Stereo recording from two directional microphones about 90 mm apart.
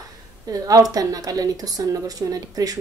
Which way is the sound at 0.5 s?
40° right (ahead or behind).